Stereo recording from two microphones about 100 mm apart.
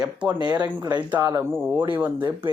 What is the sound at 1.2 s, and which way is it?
Speech, 30° right (ahead or behind).